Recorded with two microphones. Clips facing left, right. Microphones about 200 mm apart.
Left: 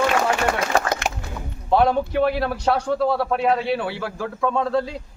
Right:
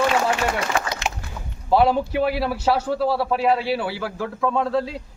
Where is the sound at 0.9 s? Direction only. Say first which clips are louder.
Left 3 dB; 50° left (ahead or behind).